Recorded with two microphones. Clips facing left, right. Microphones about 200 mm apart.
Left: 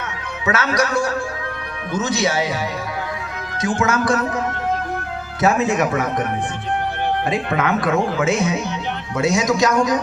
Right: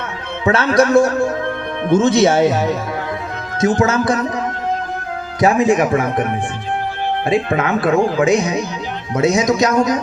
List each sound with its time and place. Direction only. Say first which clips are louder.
0.4 s speech: right 5 dB; 30° right (ahead or behind)
0.8 s speech: right 8 dB; 55° right (ahead or behind)
3.6 s speech: right 5 dB; 40° right (ahead or behind); by 4.3 s 20° right (ahead or behind)
5.4 s speech: right 4 dB; 15° right (ahead or behind)
7.3 s speech: right 6 dB; 30° right (ahead or behind)
8.2 s speech: right 4 dB; 15° right (ahead or behind)